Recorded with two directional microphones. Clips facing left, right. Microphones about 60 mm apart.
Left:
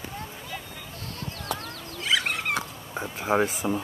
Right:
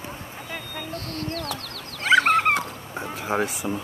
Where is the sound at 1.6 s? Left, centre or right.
Right.